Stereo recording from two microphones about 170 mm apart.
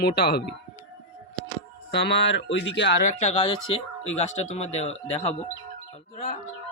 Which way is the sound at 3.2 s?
35° left (ahead or behind).